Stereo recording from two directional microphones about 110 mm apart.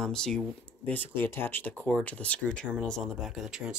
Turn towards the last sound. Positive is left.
turn(degrees=-5)  # may be behind; listen again after turning